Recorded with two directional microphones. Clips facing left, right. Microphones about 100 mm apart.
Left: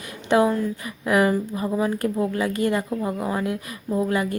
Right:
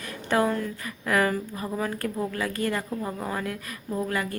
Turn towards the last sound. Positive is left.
turn(degrees=20)  # may be behind; listen again after turning